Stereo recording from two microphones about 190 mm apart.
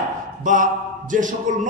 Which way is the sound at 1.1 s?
40° right (ahead or behind).